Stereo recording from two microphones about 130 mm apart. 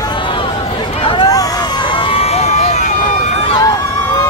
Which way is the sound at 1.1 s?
35° left (ahead or behind).